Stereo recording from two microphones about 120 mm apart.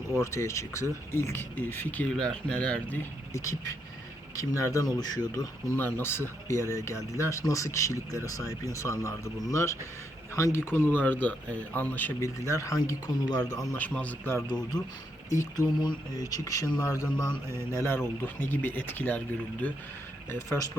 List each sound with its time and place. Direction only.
0.1 s speech: 25° left (ahead or behind)
4.4 s speech: 25° left (ahead or behind)
5.7 s speech: 20° left (ahead or behind)
13.7 s speech: 10° left (ahead or behind)
14.4 s speech: 35° left (ahead or behind); by 19.8 s 15° left (ahead or behind)